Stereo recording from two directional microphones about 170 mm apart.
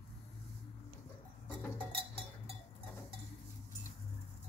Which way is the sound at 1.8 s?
35° right (ahead or behind).